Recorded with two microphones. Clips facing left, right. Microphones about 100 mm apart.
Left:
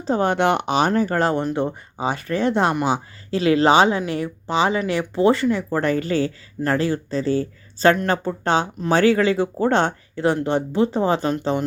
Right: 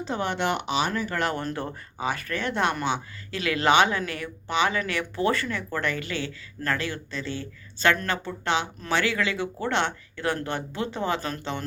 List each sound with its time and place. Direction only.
0.0 s speech: 40° left (ahead or behind)
1.5 s speech: 25° left (ahead or behind)